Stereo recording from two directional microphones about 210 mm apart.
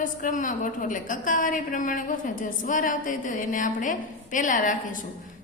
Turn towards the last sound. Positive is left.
turn(degrees=40)  # may be behind; listen again after turning